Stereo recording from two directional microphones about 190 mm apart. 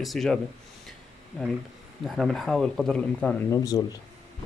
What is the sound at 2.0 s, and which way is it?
Speech, centre (ahead or behind).